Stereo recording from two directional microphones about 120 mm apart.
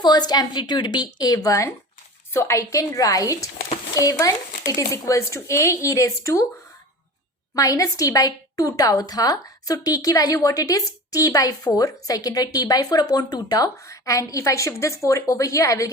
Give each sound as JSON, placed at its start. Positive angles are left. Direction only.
{"t": 0.0, "sound": "a woman's voice", "side_deg": 35}
{"t": 7.5, "sound": "a woman's voice", "side_deg": 30}